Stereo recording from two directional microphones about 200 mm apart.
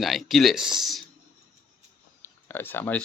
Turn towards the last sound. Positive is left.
turn(degrees=10)  # may be behind; listen again after turning